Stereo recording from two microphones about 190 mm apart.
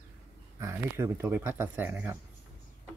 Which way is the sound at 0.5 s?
15° right (ahead or behind).